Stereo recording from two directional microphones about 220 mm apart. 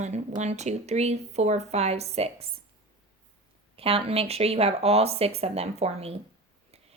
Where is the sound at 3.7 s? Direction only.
25° right (ahead or behind).